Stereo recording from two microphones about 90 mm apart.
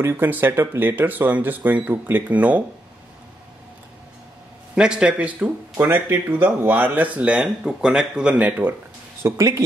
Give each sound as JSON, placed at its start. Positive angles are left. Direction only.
{"t": 0.0, "sound": "speech", "side_deg": -25}
{"t": 4.7, "sound": "speech", "side_deg": -10}
{"t": 5.8, "sound": "speech", "side_deg": -25}
{"t": 9.2, "sound": "speech", "side_deg": -35}